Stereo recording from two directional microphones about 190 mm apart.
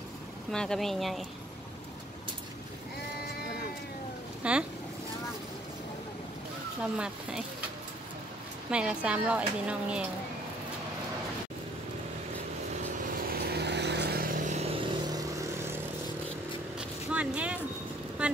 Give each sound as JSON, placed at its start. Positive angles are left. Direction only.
{"t": 0.5, "sound": "speech", "side_deg": 5}
{"t": 4.4, "sound": "speech", "side_deg": -5}
{"t": 6.8, "sound": "speech", "side_deg": -5}
{"t": 8.6, "sound": "speech", "side_deg": -5}
{"t": 13.3, "sound": "vehicle", "side_deg": -60}
{"t": 15.0, "sound": "vehicle", "side_deg": -20}
{"t": 17.1, "sound": "a sound", "side_deg": -5}